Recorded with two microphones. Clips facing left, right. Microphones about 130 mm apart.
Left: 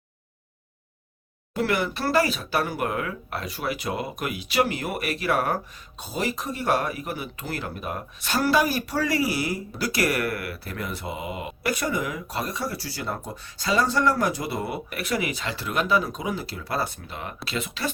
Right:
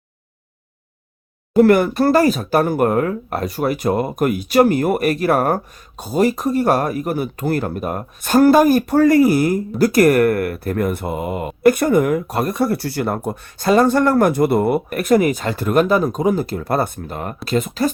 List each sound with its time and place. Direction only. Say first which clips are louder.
1.5 s speech: right 13 dB; 50° right (ahead or behind)